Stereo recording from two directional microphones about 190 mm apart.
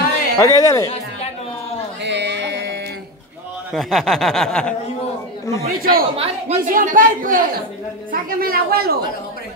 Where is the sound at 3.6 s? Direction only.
Centre (ahead or behind).